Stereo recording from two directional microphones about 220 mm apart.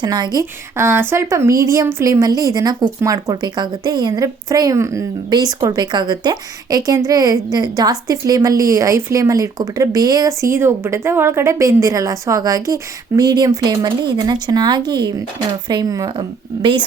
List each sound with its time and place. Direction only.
0.0 s a woman's voice: 20° right (ahead or behind)